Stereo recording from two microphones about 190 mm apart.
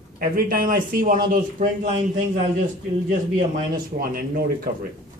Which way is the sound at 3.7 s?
50° right (ahead or behind).